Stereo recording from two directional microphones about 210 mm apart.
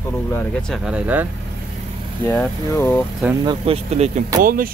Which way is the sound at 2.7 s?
10° left (ahead or behind).